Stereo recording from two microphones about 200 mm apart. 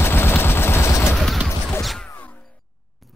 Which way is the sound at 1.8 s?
Centre (ahead or behind).